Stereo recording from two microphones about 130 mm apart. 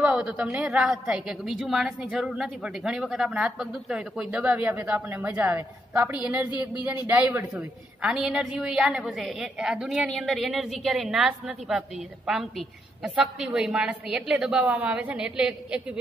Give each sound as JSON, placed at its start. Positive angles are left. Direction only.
{"t": 0.0, "sound": "a woman's voice", "side_deg": -5}